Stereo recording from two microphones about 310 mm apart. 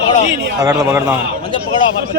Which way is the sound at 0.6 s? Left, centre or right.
Centre.